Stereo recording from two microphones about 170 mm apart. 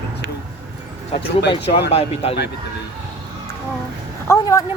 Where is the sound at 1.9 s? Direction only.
35° left (ahead or behind).